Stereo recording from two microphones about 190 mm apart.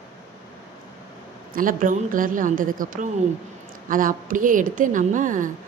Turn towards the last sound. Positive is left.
turn(degrees=-45)  # may be behind; listen again after turning